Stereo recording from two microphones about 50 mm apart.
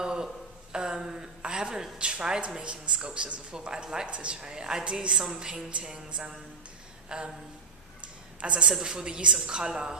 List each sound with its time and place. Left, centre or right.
0.0 s a sound: centre
0.7 s a woman's voice: centre
8.4 s a man's voice: right
8.6 s a woman's voice: centre